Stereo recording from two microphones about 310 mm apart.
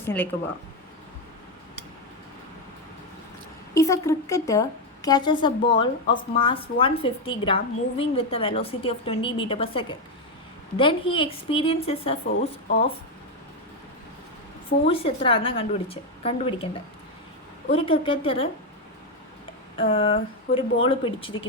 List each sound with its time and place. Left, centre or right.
0.0 s speech: centre
3.8 s speech: centre
14.8 s speech: centre
17.7 s speech: centre
19.8 s speech: centre